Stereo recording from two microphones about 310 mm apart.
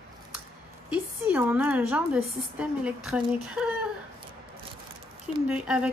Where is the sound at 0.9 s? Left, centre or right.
Centre.